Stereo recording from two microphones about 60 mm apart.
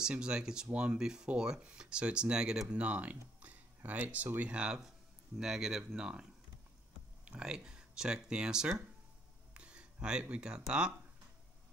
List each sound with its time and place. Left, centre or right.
0.0 s speech: centre
4.5 s speech: centre
7.2 s speech: centre
9.5 s a sound: centre
10.2 s speech: centre